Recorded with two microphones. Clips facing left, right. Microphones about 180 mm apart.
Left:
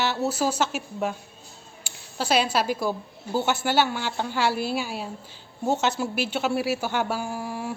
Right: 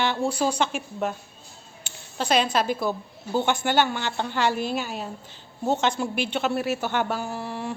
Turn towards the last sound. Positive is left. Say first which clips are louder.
# even
turn(degrees=10)  # may be behind; listen again after turning